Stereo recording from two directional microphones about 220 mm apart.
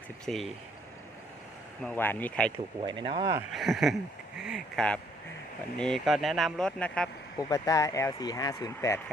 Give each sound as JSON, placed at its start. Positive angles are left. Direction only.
{"t": 0.3, "sound": "speech", "side_deg": 0}
{"t": 1.8, "sound": "speech", "side_deg": 5}
{"t": 2.8, "sound": "speech", "side_deg": -20}
{"t": 3.5, "sound": "speech", "side_deg": 0}
{"t": 7.3, "sound": "speech", "side_deg": 15}